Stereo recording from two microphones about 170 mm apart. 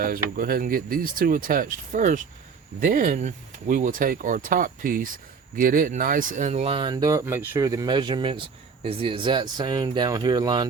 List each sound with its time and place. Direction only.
0.0 s speech: 60° right (ahead or behind); by 10.7 s 25° right (ahead or behind)